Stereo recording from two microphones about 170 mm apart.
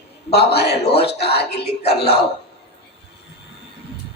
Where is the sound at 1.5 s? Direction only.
35° left (ahead or behind).